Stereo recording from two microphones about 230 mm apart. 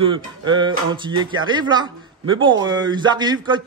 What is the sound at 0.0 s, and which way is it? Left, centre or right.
Speech, right.